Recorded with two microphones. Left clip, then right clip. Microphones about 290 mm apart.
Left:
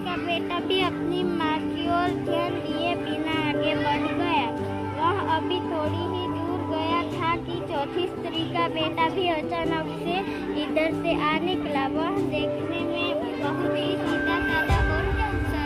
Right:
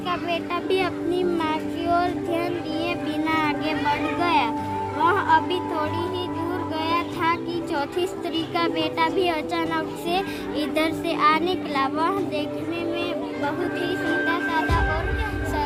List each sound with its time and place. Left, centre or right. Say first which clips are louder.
0.3 s music: left 1 dB; right
8.5 s a sound: right 2 dB; right
9.7 s music: right 3 dB; right